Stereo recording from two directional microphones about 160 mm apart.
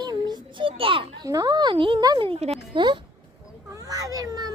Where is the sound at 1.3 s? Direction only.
25° right (ahead or behind).